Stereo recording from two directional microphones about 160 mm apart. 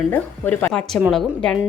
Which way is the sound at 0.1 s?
10° left (ahead or behind).